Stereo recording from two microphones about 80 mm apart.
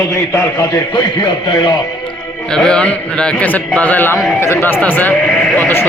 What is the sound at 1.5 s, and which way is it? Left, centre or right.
Speech, left.